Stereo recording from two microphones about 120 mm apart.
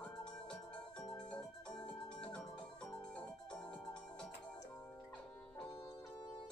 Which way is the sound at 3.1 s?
10° left (ahead or behind).